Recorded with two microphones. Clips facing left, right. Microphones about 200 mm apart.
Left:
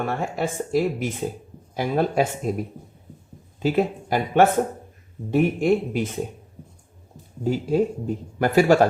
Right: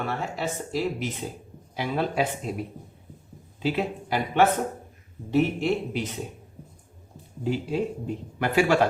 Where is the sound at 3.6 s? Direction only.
45° left (ahead or behind).